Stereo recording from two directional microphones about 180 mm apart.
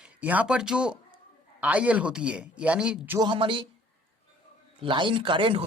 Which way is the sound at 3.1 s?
25° right (ahead or behind).